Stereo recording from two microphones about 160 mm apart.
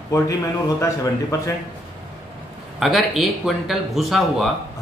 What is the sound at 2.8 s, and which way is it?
Speech, centre (ahead or behind).